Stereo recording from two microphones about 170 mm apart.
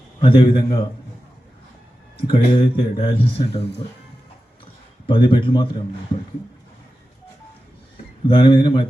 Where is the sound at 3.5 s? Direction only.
75° left (ahead or behind).